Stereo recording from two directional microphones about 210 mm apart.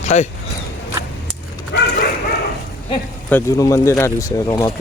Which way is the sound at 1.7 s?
55° left (ahead or behind).